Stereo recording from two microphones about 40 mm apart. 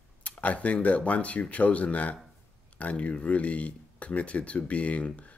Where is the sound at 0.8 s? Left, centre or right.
Left.